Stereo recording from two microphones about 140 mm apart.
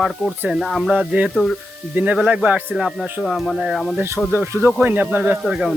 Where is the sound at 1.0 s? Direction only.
10° right (ahead or behind).